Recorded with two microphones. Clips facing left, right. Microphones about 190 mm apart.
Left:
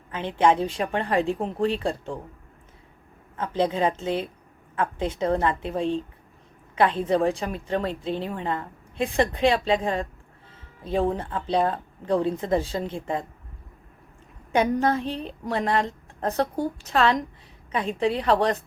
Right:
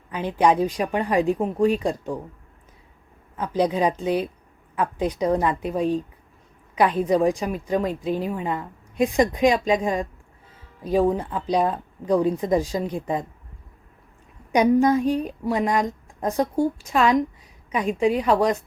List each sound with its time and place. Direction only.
0.3 s a woman's voice: 15° right (ahead or behind)
3.3 s a woman's voice: 15° right (ahead or behind)
5.2 s a woman's voice: 15° right (ahead or behind)
6.7 s a woman's voice: 15° right (ahead or behind)
14.5 s a woman's voice: 15° right (ahead or behind)